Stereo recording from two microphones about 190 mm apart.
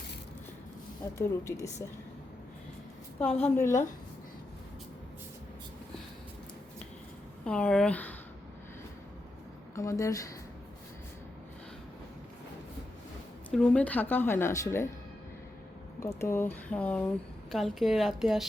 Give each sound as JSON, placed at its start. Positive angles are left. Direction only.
{"t": 1.2, "sound": "a woman's voice", "side_deg": 15}
{"t": 3.2, "sound": "a woman's voice", "side_deg": 30}
{"t": 3.5, "sound": "a woman's voice", "side_deg": 15}
{"t": 7.4, "sound": "speech", "side_deg": 5}
{"t": 9.7, "sound": "a woman's voice", "side_deg": 15}
{"t": 13.5, "sound": "a woman's voice", "side_deg": 5}
{"t": 16.0, "sound": "a woman's voice", "side_deg": 15}